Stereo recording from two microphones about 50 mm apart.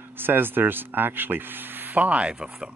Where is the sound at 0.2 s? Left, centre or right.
Right.